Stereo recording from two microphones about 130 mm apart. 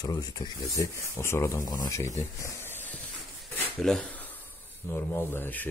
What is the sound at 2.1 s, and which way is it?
Snake, 20° left (ahead or behind).